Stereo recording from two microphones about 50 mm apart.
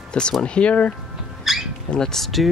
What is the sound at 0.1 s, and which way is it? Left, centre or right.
Speech, centre.